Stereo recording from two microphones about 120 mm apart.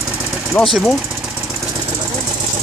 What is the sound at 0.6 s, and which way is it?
Speech, 15° left (ahead or behind).